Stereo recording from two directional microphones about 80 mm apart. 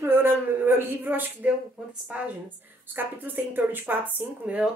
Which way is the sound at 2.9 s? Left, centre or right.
Right.